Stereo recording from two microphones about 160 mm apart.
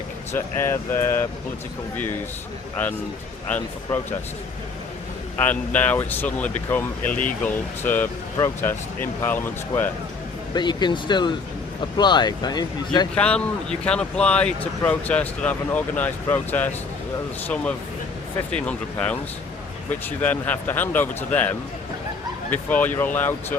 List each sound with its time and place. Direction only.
0.3 s speech: 15° left (ahead or behind)
5.4 s speech: 10° left (ahead or behind)
10.5 s speech: 30° left (ahead or behind)
13.1 s speech: 5° left (ahead or behind)
22.7 s speech: 10° left (ahead or behind)